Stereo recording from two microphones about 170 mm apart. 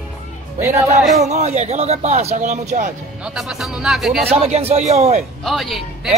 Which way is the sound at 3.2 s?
5° right (ahead or behind).